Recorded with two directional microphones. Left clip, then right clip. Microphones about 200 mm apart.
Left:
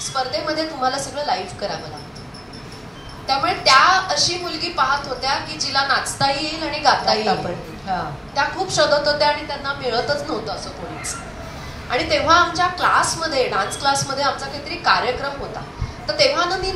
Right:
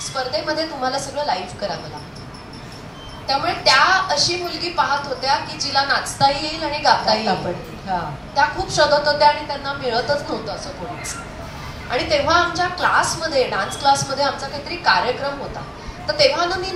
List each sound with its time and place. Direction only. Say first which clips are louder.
0.1 s a woman's voice: even; 25° left (ahead or behind)
3.3 s a woman's voice: left 1 dB; 25° left (ahead or behind)
8.4 s a woman's voice: right 2 dB; 25° left (ahead or behind)
11.9 s a woman's voice: left 1 dB; 25° left (ahead or behind)
16.1 s a woman's voice: right 1 dB; 25° left (ahead or behind)